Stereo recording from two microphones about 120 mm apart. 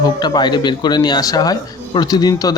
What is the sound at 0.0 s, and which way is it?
Speech, 35° left (ahead or behind).